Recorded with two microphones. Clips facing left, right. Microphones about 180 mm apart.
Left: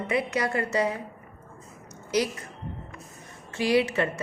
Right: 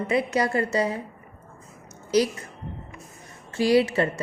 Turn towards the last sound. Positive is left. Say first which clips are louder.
# right 3 dB
turn(degrees=-35)  # may be behind; listen again after turning